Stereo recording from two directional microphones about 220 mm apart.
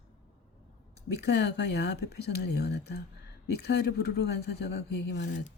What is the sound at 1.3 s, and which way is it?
Speech, 50° left (ahead or behind).